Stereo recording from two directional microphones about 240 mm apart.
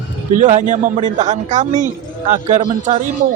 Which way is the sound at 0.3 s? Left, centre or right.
Right.